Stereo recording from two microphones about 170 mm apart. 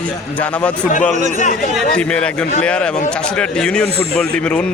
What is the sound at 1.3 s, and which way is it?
Speech, 50° left (ahead or behind).